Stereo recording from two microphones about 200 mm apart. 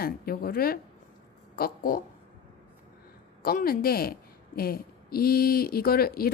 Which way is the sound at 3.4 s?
45° left (ahead or behind).